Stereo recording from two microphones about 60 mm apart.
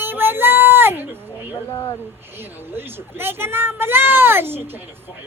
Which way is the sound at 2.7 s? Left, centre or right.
Right.